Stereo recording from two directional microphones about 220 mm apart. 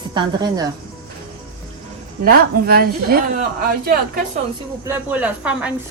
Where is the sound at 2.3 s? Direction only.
45° right (ahead or behind).